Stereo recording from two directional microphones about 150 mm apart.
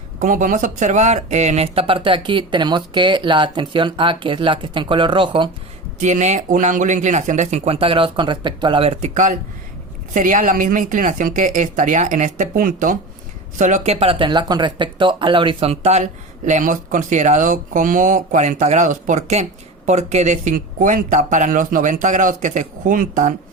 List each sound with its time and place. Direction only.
0.2 s speech: 60° right (ahead or behind); by 5.5 s 35° right (ahead or behind)
6.0 s speech: 55° right (ahead or behind)
9.1 s speech: 60° right (ahead or behind)
16.5 s speech: 60° right (ahead or behind)